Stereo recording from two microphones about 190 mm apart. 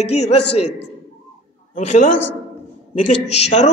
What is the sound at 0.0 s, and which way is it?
Speech, 35° left (ahead or behind).